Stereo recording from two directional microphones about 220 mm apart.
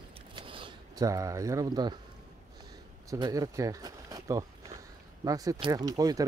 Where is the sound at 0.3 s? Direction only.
25° right (ahead or behind).